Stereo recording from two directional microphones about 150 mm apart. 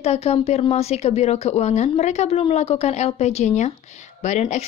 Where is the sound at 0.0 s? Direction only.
45° left (ahead or behind).